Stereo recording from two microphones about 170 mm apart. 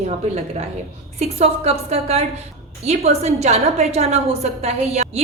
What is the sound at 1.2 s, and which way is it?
A woman's voice, 40° right (ahead or behind).